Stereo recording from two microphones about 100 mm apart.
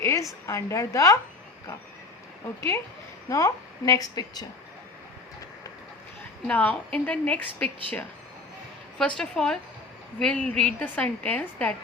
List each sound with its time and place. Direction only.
0.0 s a sound: 30° left (ahead or behind)
0.4 s a woman's voice: 30° left (ahead or behind)
2.6 s a woman's voice: 30° left (ahead or behind)
6.5 s a woman's voice: 15° left (ahead or behind)
9.0 s a woman's voice: 5° left (ahead or behind)